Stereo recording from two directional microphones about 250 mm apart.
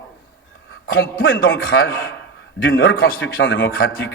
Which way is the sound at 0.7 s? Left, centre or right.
Left.